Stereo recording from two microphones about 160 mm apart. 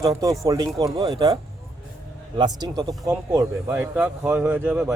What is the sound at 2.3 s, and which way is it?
Speech, 25° right (ahead or behind).